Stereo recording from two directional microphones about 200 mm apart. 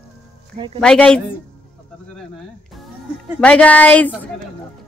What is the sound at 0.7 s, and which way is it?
Speech, 5° left (ahead or behind).